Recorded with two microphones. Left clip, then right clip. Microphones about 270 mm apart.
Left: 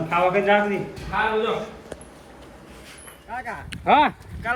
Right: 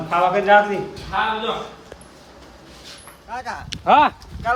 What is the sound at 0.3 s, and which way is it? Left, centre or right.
Speech, right.